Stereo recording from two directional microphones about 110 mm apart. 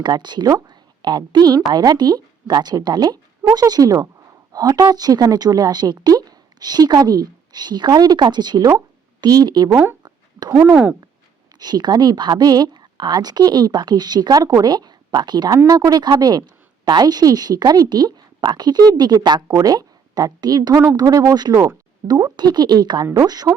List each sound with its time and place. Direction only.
0.0 s a woman's voice: 40° right (ahead or behind)
9.6 s speech: 20° right (ahead or behind)
11.6 s speech: 40° right (ahead or behind)